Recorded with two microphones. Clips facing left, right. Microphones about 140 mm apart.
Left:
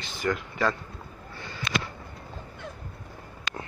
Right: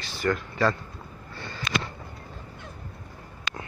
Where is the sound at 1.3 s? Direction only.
15° left (ahead or behind).